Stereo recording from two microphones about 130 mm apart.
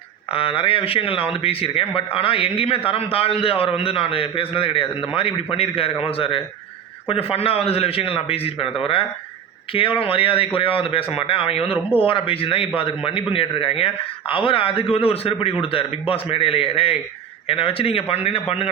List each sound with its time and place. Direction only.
0.3 s a man's voice: 45° left (ahead or behind)